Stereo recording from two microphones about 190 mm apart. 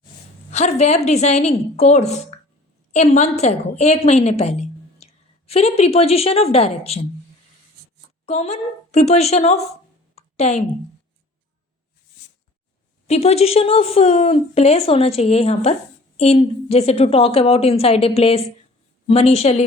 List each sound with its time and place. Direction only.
0.5 s a woman's voice: 35° left (ahead or behind)
8.3 s speech: 35° left (ahead or behind)
10.2 s a sound: 35° left (ahead or behind)
13.1 s speech: 35° left (ahead or behind)